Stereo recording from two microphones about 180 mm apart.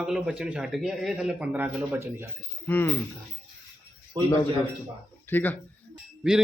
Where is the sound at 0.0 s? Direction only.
5° right (ahead or behind).